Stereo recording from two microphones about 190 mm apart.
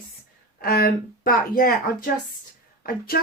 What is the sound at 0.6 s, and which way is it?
Speech, 50° left (ahead or behind).